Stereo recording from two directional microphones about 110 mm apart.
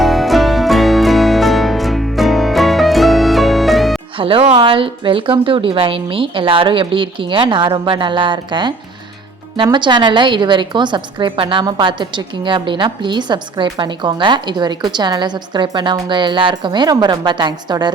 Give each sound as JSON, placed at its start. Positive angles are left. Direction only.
{"t": 0.0, "sound": "music", "side_deg": 0}
{"t": 4.2, "sound": "a woman's voice", "side_deg": -55}
{"t": 9.7, "sound": "a woman's voice", "side_deg": -45}